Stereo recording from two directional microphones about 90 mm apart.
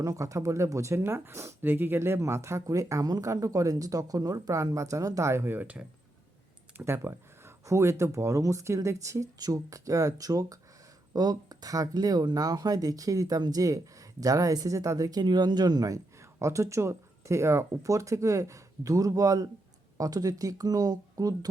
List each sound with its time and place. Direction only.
0.0 s speech: 35° right (ahead or behind)
15.2 s speech: 50° right (ahead or behind)